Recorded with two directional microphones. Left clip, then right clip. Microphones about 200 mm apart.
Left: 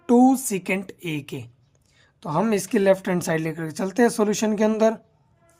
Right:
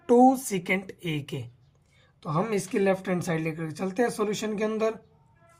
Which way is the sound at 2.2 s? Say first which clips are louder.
Left 5 dB; 50° left (ahead or behind).